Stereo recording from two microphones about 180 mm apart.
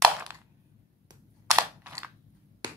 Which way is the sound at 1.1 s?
15° right (ahead or behind).